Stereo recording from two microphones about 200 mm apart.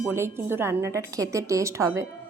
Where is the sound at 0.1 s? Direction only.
10° right (ahead or behind).